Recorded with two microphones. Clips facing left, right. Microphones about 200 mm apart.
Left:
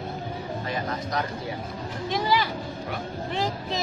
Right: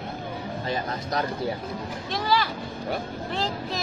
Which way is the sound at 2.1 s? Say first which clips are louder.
Left 1 dB; 15° left (ahead or behind).